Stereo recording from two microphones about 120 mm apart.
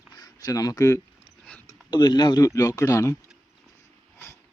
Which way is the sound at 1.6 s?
40° left (ahead or behind).